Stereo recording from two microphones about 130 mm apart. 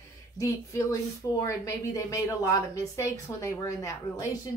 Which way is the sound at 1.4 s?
25° left (ahead or behind).